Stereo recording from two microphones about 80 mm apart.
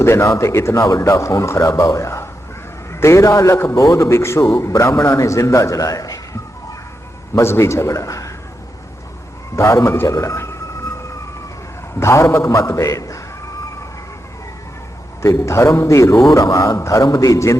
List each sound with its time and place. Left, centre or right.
0.0 s a man's voice: left
7.3 s a man's voice: left
9.6 s a man's voice: left
11.9 s a man's voice: left
15.2 s a man's voice: left